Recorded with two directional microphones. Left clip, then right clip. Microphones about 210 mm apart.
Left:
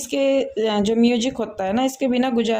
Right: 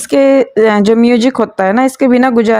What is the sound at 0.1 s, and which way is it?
A woman's voice, 40° right (ahead or behind).